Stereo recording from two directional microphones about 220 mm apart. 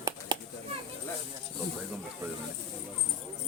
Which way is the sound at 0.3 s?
20° right (ahead or behind).